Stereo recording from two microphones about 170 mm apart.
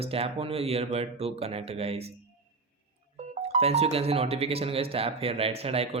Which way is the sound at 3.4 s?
40° right (ahead or behind).